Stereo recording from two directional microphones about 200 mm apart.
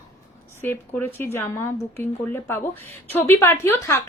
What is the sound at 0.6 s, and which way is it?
A woman's voice, 10° left (ahead or behind).